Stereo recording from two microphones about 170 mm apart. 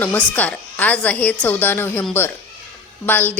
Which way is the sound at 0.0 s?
10° left (ahead or behind).